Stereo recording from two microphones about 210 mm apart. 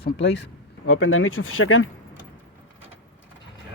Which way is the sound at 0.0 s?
55° left (ahead or behind).